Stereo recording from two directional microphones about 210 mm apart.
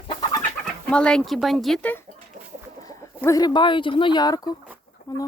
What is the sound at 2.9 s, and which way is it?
Speech, 15° left (ahead or behind).